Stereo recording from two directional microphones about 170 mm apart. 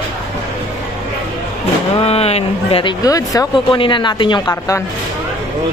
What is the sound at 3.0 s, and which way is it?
Speech, 20° left (ahead or behind).